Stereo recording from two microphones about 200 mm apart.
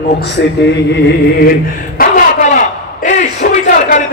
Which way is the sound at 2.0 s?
40° left (ahead or behind).